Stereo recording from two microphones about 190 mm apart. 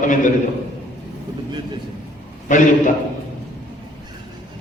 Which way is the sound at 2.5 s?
40° left (ahead or behind).